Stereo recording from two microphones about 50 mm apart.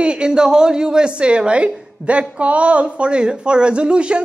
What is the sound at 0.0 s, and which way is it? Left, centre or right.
A woman's voice, centre.